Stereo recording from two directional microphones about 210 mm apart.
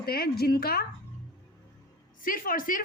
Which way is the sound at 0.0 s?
45° left (ahead or behind).